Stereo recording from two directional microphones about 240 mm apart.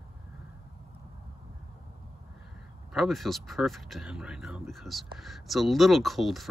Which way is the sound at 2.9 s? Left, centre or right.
Centre.